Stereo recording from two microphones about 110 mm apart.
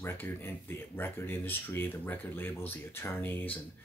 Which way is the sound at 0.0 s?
20° left (ahead or behind).